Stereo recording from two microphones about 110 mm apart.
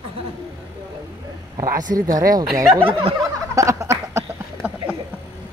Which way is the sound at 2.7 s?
50° right (ahead or behind).